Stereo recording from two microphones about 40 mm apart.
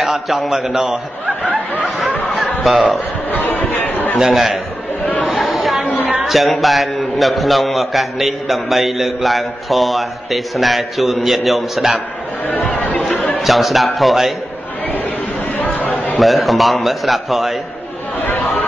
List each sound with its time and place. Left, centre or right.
0.0 s a man's voice: centre
1.2 s snicker: right
2.3 s music: centre
3.3 s chatter: left
4.3 s a man's voice: centre
5.4 s chatter: centre
6.2 s a man's voice: centre
12.6 s chatter: left
12.9 s a sound: left
13.4 s a man's voice: centre
15.6 s chatter: left
16.2 s a man's voice: centre
18.2 s chatter: left